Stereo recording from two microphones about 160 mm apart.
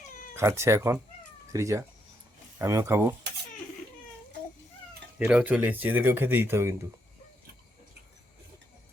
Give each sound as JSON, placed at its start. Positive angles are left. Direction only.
{"t": 0.3, "sound": "speech", "side_deg": -15}
{"t": 5.2, "sound": "speech", "side_deg": -5}